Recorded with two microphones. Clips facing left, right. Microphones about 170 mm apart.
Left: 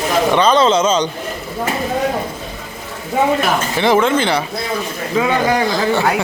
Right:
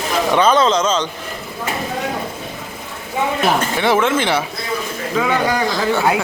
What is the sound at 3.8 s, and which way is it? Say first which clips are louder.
Speech: left 5 dB; centre (ahead or behind).